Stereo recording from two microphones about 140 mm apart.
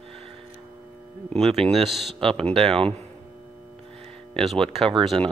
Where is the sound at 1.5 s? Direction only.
45° right (ahead or behind).